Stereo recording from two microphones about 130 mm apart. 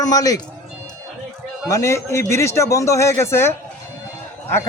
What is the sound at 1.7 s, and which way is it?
Speech, 25° left (ahead or behind).